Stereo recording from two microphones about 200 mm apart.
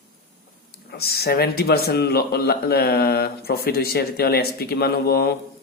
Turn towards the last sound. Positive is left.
turn(degrees=50)  # may be behind; listen again after turning